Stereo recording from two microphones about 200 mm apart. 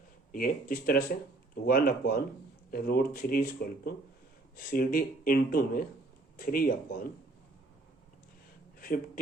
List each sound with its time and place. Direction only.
0.3 s speech: 45° left (ahead or behind)